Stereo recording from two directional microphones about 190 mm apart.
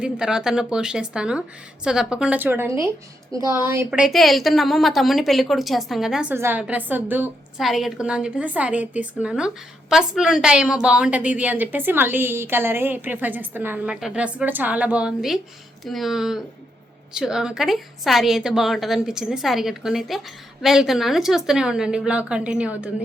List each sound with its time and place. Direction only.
0.0 s a woman's voice: 5° right (ahead or behind)
4.0 s a woman's voice: centre (ahead or behind)